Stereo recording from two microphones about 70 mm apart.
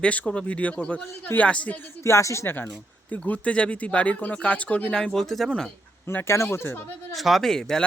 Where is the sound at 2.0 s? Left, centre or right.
Left.